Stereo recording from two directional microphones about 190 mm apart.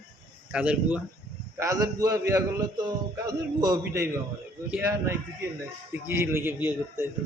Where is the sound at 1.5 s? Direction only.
15° right (ahead or behind).